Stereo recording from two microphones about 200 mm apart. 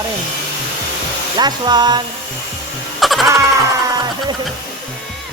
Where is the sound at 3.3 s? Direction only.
15° right (ahead or behind).